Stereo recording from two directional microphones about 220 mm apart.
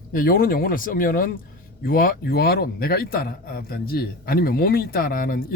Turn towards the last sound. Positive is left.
turn(degrees=40)  # may be behind; listen again after turning